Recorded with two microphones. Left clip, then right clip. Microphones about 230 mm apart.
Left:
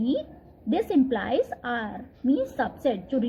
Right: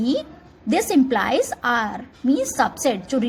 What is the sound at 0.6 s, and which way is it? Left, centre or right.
A woman's voice, centre.